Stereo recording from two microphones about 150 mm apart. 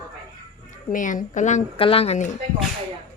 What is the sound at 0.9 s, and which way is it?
Speech, 60° left (ahead or behind).